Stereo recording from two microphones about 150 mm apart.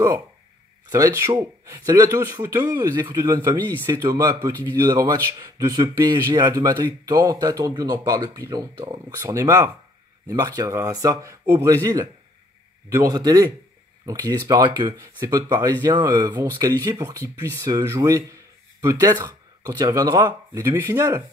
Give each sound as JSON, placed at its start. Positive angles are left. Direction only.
{"t": 0.9, "sound": "speech", "side_deg": -20}
{"t": 2.5, "sound": "speech", "side_deg": -15}
{"t": 3.0, "sound": "speech", "side_deg": -30}